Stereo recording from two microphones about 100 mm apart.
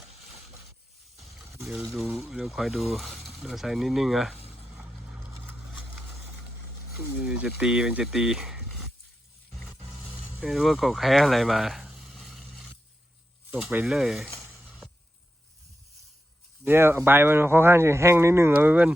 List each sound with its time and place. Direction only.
1.1 s a sound: centre (ahead or behind)
1.6 s speech: centre (ahead or behind)
7.3 s speech: 10° right (ahead or behind)
9.5 s roar: 5° left (ahead or behind)
10.0 s a sound: 15° right (ahead or behind)
10.4 s speech: centre (ahead or behind)
13.8 s speech: 5° right (ahead or behind)
14.3 s a sound: 20° right (ahead or behind)
16.6 s speech: 25° right (ahead or behind)